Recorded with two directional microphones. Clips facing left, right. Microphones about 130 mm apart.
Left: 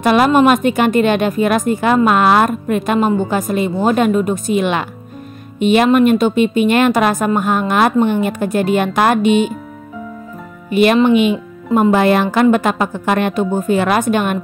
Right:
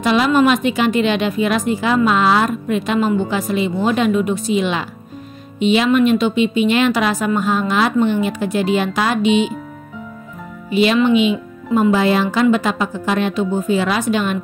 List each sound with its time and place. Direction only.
0.0 s a woman's voice: 50° left (ahead or behind)
10.7 s speech: 55° left (ahead or behind)